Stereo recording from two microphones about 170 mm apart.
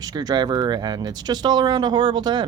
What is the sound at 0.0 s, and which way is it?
Speech, 25° right (ahead or behind).